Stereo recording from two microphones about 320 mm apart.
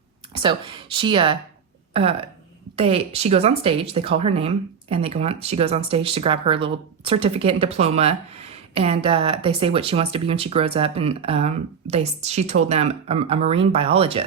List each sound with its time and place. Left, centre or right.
0.3 s speech: centre